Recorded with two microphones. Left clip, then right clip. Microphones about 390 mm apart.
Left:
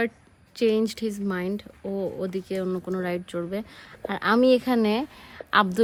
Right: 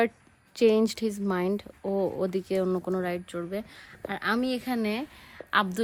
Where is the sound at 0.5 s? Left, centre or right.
Centre.